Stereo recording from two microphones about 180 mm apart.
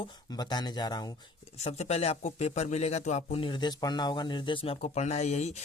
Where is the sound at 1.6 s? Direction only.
35° left (ahead or behind).